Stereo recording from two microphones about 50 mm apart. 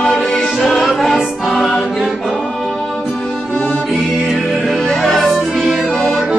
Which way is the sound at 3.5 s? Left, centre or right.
Left.